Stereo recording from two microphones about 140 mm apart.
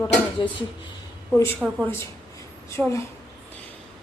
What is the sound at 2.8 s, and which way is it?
Speech, 10° left (ahead or behind).